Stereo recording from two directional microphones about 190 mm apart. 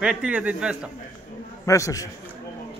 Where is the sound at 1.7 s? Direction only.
15° left (ahead or behind).